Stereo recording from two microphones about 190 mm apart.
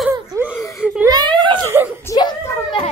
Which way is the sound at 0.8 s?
5° right (ahead or behind).